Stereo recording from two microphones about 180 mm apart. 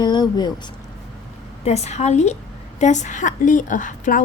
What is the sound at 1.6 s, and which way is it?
A woman's voice, 40° left (ahead or behind).